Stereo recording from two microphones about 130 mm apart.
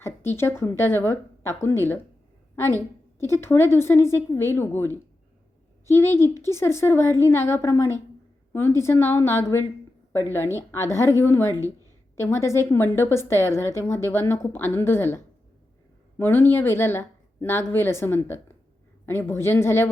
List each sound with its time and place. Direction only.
0.0 s a woman's voice: 20° left (ahead or behind)
3.2 s a woman's voice: 20° left (ahead or behind)